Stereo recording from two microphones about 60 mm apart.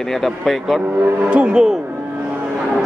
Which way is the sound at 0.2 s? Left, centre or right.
Centre.